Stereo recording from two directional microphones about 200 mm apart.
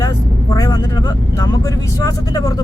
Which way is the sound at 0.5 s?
20° left (ahead or behind).